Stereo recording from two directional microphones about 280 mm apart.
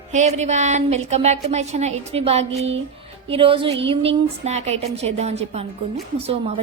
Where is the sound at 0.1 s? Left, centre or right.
Right.